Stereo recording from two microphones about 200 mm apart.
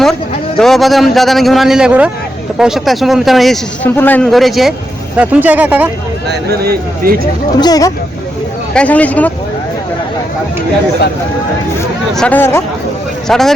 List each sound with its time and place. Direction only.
0.6 s a man's voice: centre (ahead or behind)
6.2 s speech: 50° right (ahead or behind)
7.6 s speech: 20° left (ahead or behind)
8.7 s speech: 5° left (ahead or behind)
12.1 s a man's voice: 5° left (ahead or behind)